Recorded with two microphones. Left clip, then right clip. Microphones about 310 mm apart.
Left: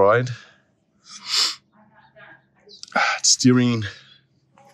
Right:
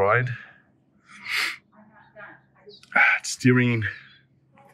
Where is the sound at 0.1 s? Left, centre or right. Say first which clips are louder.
Left 3 dB; centre.